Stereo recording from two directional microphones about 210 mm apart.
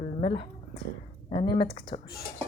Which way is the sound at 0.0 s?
30° left (ahead or behind).